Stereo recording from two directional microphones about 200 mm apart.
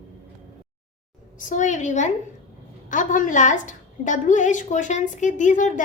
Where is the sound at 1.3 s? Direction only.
40° left (ahead or behind).